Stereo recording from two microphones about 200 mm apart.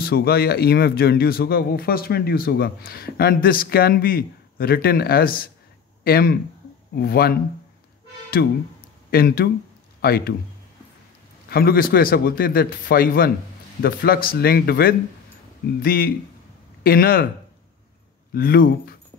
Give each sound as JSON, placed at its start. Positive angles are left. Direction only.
{"t": 0.0, "sound": "speech", "side_deg": 50}
{"t": 8.4, "sound": "speech", "side_deg": 55}
{"t": 11.4, "sound": "speech", "side_deg": 50}
{"t": 18.3, "sound": "speech", "side_deg": 45}